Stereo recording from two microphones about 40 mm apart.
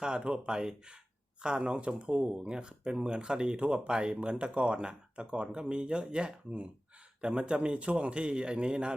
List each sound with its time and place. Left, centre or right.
0.3 s speech: right